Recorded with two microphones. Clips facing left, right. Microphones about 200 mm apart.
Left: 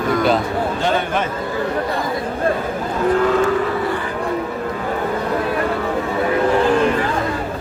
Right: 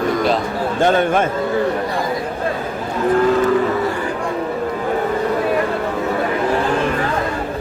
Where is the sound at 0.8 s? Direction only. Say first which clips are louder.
Right 7 dB; 50° right (ahead or behind).